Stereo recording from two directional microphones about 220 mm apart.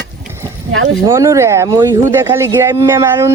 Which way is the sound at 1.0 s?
15° right (ahead or behind).